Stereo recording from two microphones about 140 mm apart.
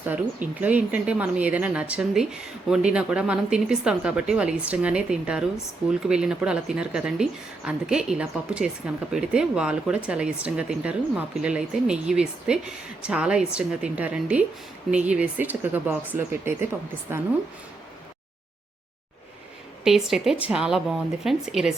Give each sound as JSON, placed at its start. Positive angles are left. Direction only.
{"t": 0.0, "sound": "a woman's voice", "side_deg": -10}
{"t": 19.8, "sound": "a woman's voice", "side_deg": -5}